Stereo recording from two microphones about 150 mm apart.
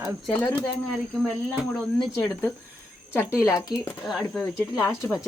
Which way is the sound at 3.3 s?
20° left (ahead or behind).